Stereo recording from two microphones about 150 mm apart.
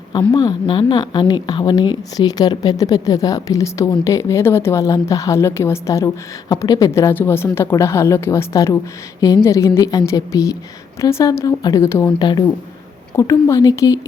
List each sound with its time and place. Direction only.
0.3 s a woman's voice: 30° left (ahead or behind)
12.2 s a woman's voice: 30° left (ahead or behind)